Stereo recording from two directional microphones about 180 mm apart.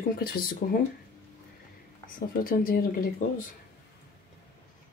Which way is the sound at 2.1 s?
50° left (ahead or behind).